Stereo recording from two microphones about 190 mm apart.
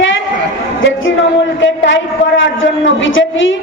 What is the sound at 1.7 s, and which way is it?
A man's voice, 85° left.